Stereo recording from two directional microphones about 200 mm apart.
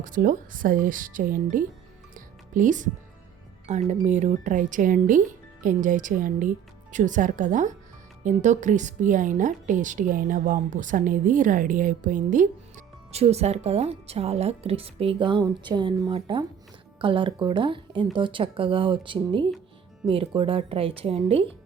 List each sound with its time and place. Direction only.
0.0 s speech: 40° right (ahead or behind)
2.1 s music: 40° right (ahead or behind)
3.7 s a woman's voice: 35° right (ahead or behind)